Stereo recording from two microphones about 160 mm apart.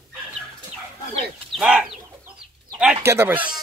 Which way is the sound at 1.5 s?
5° right (ahead or behind).